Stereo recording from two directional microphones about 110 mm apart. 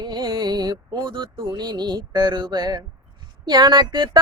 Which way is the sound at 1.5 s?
40° right (ahead or behind).